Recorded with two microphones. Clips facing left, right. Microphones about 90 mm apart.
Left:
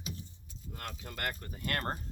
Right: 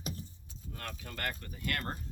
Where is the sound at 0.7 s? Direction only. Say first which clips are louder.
Even; 15° left (ahead or behind).